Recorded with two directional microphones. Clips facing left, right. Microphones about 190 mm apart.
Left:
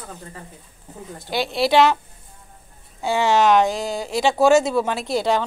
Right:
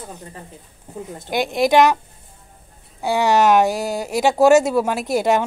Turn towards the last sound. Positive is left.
turn(degrees=-15)  # may be behind; listen again after turning